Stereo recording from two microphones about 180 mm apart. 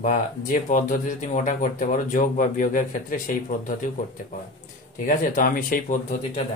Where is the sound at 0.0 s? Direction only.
45° left (ahead or behind).